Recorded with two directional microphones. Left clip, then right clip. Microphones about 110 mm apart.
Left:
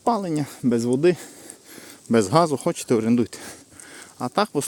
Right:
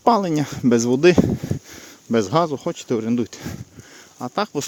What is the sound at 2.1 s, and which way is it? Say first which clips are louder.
Speech: left 1 dB; 10° left (ahead or behind).